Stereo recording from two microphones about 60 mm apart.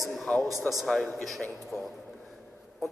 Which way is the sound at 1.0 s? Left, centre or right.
Centre.